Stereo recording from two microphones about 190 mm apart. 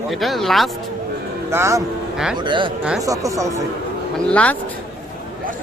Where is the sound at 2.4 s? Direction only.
25° right (ahead or behind).